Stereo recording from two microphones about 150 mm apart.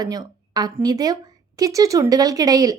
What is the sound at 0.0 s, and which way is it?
A woman's voice, 25° right (ahead or behind).